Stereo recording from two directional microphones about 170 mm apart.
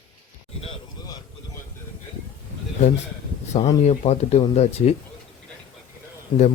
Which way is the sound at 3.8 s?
40° left (ahead or behind).